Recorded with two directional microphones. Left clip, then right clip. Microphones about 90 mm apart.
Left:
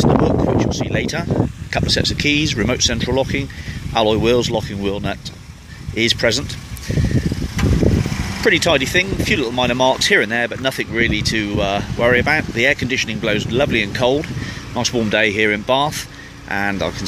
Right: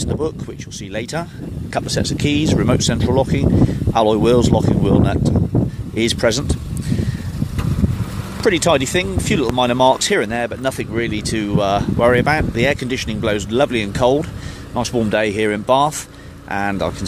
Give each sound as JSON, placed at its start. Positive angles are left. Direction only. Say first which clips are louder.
{"t": 0.6, "sound": "speech", "louder": "left 8 dB", "side_deg": -30}
{"t": 1.7, "sound": "speech", "louder": "left 1 dB", "side_deg": -15}
{"t": 8.4, "sound": "speech", "louder": "even", "side_deg": -20}